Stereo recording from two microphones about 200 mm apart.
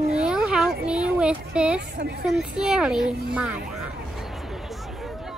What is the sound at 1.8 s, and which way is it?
Speech, 55° right (ahead or behind).